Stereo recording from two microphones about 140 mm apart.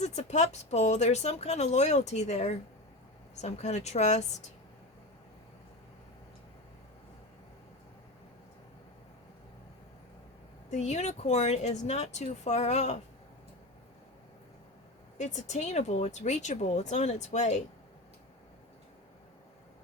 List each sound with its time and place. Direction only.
0.0 s speech: 55° left (ahead or behind)
10.7 s speech: 50° left (ahead or behind)
15.2 s speech: 55° left (ahead or behind)